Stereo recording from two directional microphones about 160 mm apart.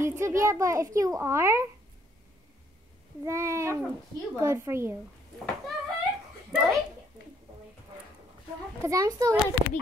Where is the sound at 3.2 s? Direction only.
20° right (ahead or behind).